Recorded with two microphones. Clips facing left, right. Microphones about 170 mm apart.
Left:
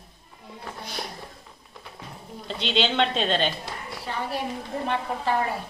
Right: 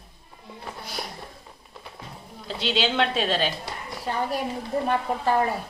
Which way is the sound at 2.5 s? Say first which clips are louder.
Even; 5° right (ahead or behind).